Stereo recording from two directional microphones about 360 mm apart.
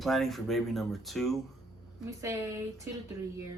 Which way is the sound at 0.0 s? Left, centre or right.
Centre.